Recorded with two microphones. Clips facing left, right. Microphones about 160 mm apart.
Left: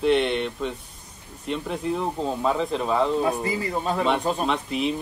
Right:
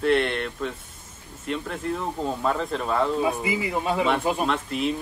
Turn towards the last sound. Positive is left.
turn(degrees=0)  # may be behind; listen again after turning